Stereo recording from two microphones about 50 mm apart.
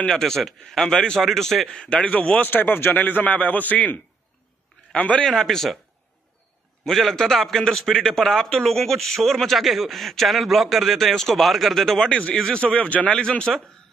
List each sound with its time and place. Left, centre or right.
0.0 s a man's voice: centre
1.2 s a man's voice: centre
2.0 s speech: left
2.4 s a man's voice: left
5.2 s a man's voice: centre
6.9 s a man's voice: centre
12.5 s speech: centre
13.1 s a man's voice: centre